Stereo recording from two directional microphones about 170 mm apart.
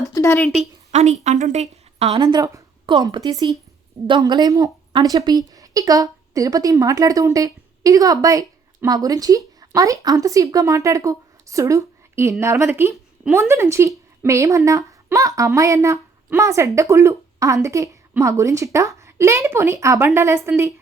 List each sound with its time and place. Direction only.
0.1 s a woman's voice: 15° left (ahead or behind)
0.4 s a woman's voice: centre (ahead or behind)
0.9 s a woman's voice: 45° right (ahead or behind)
2.2 s a woman's voice: 20° right (ahead or behind)